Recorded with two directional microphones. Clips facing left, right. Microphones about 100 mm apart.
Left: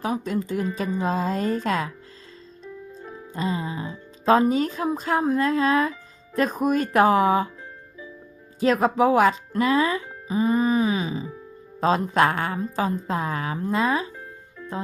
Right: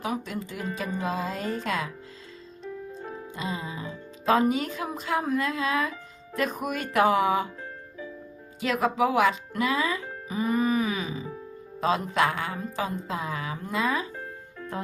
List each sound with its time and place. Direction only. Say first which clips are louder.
0.0 s speech: left 5 dB; 35° left (ahead or behind)
3.3 s speech: left 7 dB; 40° left (ahead or behind)
8.6 s speech: left 5 dB; 35° left (ahead or behind)
10.2 s music: left 4 dB; 30° left (ahead or behind)
11.8 s speech: left 4 dB; 40° left (ahead or behind)
13.6 s speech: left 5 dB; 35° left (ahead or behind)